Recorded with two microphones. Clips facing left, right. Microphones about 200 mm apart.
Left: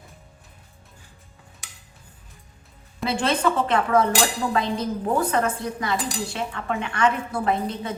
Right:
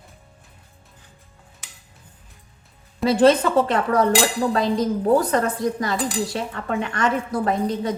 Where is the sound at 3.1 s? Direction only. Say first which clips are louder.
Right 7 dB; 40° right (ahead or behind).